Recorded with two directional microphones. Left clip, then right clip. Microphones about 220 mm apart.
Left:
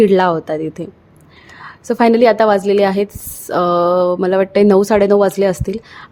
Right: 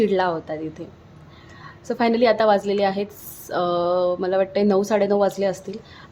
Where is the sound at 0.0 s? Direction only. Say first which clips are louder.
Left 9 dB; 30° left (ahead or behind).